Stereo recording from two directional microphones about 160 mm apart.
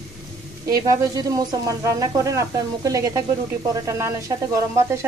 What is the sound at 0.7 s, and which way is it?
Speech, 25° right (ahead or behind).